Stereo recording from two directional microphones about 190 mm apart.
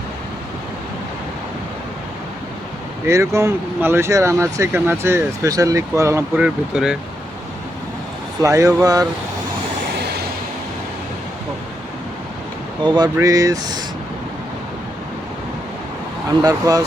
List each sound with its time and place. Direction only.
3.1 s speech: 15° right (ahead or behind)
8.4 s speech: 15° right (ahead or behind)
12.8 s speech: 25° right (ahead or behind)
16.4 s speech: 20° right (ahead or behind)